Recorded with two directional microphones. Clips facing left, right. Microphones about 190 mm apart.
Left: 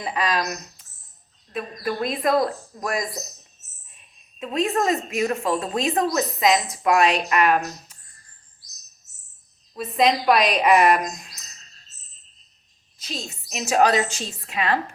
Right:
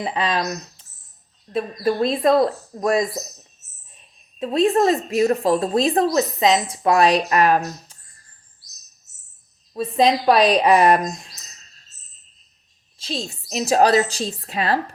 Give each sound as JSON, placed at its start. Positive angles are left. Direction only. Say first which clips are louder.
{"t": 0.0, "sound": "speech", "louder": "right 2 dB", "side_deg": -30}
{"t": 1.5, "sound": "speech", "louder": "right 6 dB", "side_deg": -30}
{"t": 9.7, "sound": "speech", "louder": "right 3 dB", "side_deg": -30}
{"t": 13.0, "sound": "speech", "louder": "right 5 dB", "side_deg": -30}